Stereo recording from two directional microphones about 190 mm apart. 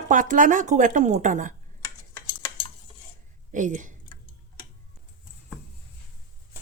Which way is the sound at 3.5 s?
40° right (ahead or behind).